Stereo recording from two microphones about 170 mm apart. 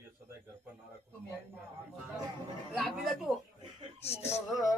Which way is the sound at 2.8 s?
Centre (ahead or behind).